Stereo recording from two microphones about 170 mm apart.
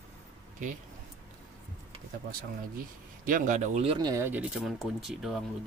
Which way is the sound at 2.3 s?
55° right (ahead or behind).